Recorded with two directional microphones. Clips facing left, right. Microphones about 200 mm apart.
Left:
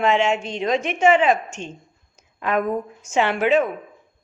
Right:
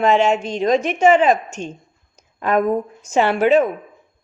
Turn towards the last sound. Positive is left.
turn(degrees=-40)  # may be behind; listen again after turning